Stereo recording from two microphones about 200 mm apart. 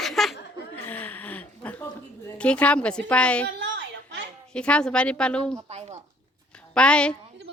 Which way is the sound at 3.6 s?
65° right (ahead or behind).